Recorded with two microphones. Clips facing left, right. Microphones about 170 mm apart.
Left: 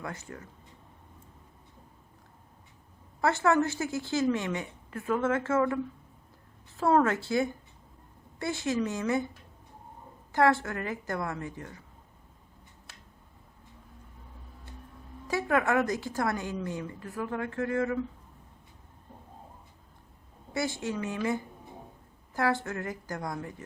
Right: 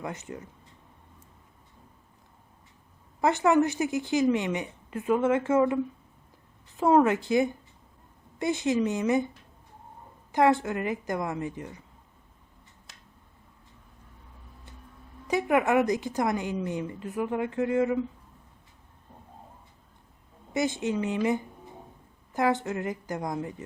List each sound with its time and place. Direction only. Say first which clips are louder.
0.0 s a woman's voice: right 3 dB; 20° right (ahead or behind)
3.2 s a woman's voice: right 3 dB; 15° right (ahead or behind)
10.3 s a woman's voice: right 2 dB; 15° right (ahead or behind)
15.3 s a woman's voice: right 3 dB; 15° right (ahead or behind)
20.5 s a woman's voice: right 4 dB; 20° right (ahead or behind)